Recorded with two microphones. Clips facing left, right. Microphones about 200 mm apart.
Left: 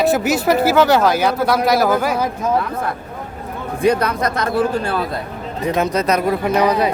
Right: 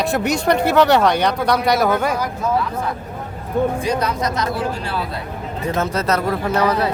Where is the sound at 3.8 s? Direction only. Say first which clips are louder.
Left 4 dB; 60° left (ahead or behind).